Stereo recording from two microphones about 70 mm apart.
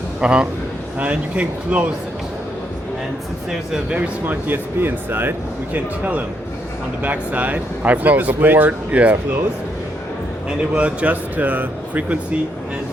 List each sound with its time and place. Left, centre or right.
0.2 s speech: centre
3.5 s speech: centre
3.9 s speech: right
10.6 s speech: centre